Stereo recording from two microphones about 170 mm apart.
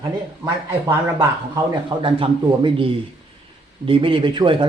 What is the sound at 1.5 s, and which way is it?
A man's voice, 30° right (ahead or behind).